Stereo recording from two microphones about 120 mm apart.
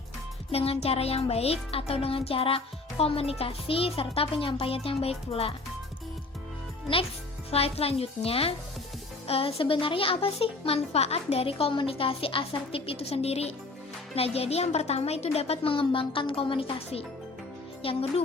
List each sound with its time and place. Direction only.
0.5 s a woman's voice: 55° left (ahead or behind)
7.5 s a woman's voice: 55° left (ahead or behind)